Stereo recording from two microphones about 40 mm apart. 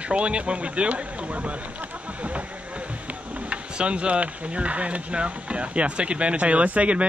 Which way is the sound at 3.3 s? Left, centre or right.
Right.